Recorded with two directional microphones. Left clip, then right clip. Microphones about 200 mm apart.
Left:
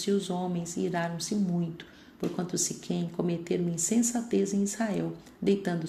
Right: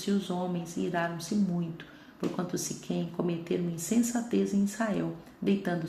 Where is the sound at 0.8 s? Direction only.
25° left (ahead or behind).